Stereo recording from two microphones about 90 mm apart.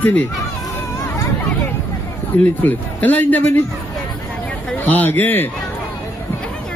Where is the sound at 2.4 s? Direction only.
20° left (ahead or behind).